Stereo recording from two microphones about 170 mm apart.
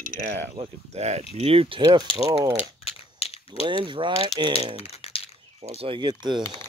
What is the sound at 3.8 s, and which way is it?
Mechanisms, 30° right (ahead or behind).